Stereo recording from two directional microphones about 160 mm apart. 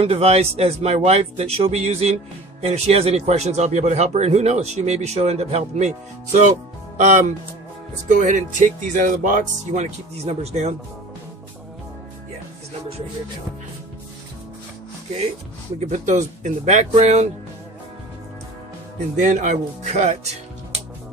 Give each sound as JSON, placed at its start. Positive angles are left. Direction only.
{"t": 0.0, "sound": "a man's voice", "side_deg": -40}
{"t": 7.0, "sound": "a man's voice", "side_deg": -50}
{"t": 15.8, "sound": "a man's voice", "side_deg": -50}
{"t": 19.1, "sound": "a man's voice", "side_deg": -50}